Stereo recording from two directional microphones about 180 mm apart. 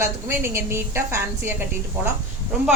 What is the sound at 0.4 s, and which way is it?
A woman's voice, 15° right (ahead or behind).